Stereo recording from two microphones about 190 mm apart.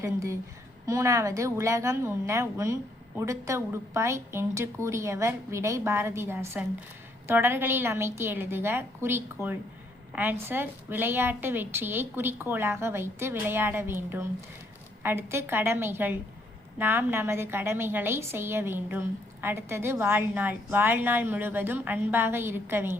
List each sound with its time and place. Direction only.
0.0 s a woman's voice: 15° right (ahead or behind)